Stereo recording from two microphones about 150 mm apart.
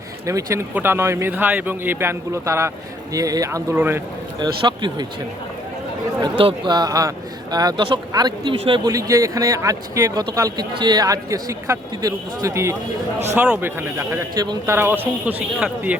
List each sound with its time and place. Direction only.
0.3 s a man's voice: 20° right (ahead or behind)
4.4 s speech: 30° right (ahead or behind)
6.2 s a man's voice: 30° right (ahead or behind)
14.8 s a man's voice: 15° right (ahead or behind)